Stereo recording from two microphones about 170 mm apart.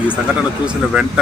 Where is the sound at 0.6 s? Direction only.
5° right (ahead or behind).